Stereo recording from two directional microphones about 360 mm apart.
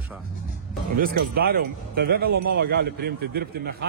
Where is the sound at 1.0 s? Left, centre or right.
Right.